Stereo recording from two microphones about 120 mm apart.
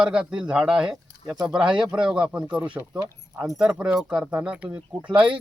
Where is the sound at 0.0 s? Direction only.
5° right (ahead or behind).